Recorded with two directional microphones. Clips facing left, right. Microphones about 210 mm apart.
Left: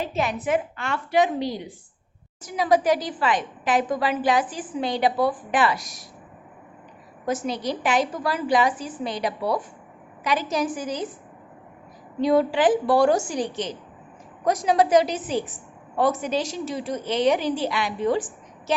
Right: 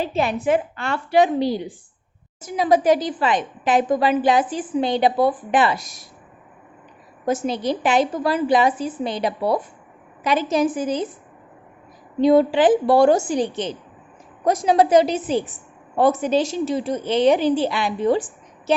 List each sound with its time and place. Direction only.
0.0 s a woman's voice: 30° right (ahead or behind)
7.3 s a woman's voice: 25° right (ahead or behind)
12.2 s a woman's voice: 25° right (ahead or behind)